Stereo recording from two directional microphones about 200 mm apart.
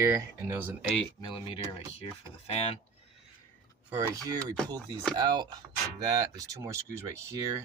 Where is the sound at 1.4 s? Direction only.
25° left (ahead or behind).